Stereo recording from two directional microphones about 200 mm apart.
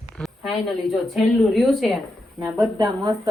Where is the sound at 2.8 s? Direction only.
20° right (ahead or behind).